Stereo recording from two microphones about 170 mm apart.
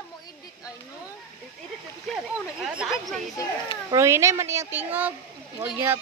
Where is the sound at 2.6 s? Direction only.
Centre (ahead or behind).